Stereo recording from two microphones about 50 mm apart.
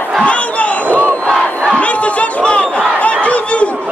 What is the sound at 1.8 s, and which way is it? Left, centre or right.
Chatter, left.